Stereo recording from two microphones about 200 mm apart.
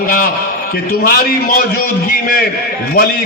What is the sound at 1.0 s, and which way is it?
Speech, 45° left (ahead or behind).